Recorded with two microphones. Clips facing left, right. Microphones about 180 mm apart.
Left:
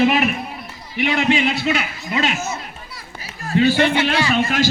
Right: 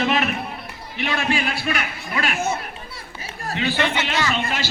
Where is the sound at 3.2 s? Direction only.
35° right (ahead or behind).